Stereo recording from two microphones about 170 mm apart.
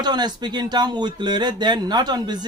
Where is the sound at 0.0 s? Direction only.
25° right (ahead or behind).